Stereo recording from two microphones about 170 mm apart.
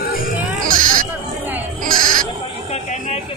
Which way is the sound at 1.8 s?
50° right (ahead or behind).